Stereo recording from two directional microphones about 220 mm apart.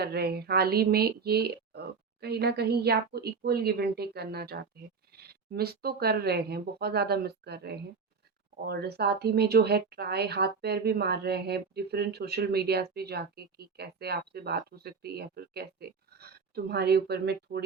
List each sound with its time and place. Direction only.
0.0 s speech: 45° right (ahead or behind)